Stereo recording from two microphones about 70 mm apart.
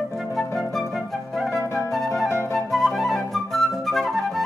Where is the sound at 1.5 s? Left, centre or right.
Left.